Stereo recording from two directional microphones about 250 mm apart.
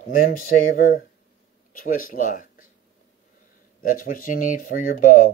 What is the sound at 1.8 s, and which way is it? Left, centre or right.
Speech, left.